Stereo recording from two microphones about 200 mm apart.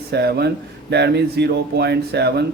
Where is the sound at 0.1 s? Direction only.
55° right (ahead or behind).